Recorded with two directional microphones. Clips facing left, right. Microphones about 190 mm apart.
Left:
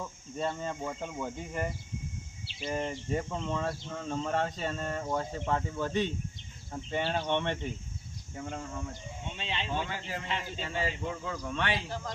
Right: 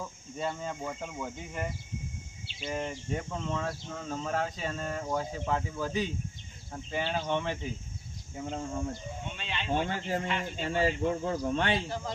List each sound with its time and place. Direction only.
0.0 s speech: centre (ahead or behind)
8.4 s cricket: 25° right (ahead or behind)
9.3 s speech: 25° left (ahead or behind)
9.7 s speech: 45° right (ahead or behind)